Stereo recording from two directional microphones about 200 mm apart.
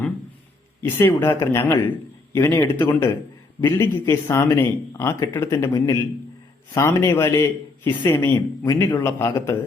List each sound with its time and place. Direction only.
0.8 s speech: 10° left (ahead or behind)